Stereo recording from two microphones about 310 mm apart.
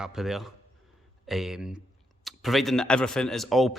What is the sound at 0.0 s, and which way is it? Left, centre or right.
A man's voice, centre.